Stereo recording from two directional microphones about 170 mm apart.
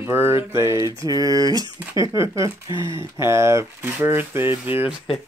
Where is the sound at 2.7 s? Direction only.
25° left (ahead or behind).